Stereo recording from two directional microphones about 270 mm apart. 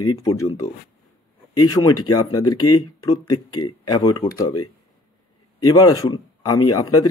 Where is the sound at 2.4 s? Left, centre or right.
Left.